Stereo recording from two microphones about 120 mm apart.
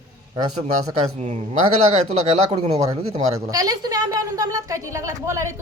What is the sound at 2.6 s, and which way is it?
Speech, 55° right (ahead or behind).